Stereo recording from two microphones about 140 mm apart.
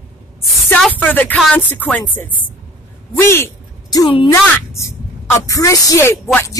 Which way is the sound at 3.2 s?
20° left (ahead or behind).